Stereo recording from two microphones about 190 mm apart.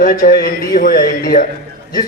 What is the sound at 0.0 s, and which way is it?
A man's voice, 45° left (ahead or behind).